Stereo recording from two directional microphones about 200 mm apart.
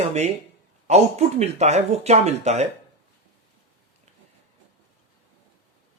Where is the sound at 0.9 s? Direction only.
35° right (ahead or behind).